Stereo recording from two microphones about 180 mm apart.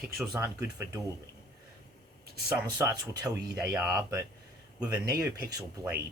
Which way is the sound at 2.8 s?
20° right (ahead or behind).